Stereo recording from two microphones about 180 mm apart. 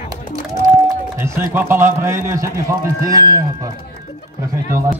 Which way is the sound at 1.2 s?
10° right (ahead or behind).